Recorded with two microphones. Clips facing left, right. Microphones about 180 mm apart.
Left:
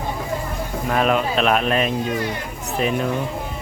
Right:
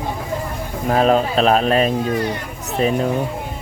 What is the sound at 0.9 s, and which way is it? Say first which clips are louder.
Speech: right 4 dB; 35° right (ahead or behind).